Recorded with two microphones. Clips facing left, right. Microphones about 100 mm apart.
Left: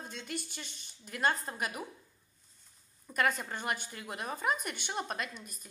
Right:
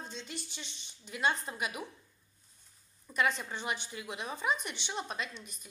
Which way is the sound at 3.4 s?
45° left (ahead or behind).